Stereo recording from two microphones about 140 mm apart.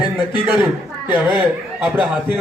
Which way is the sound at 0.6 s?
15° right (ahead or behind).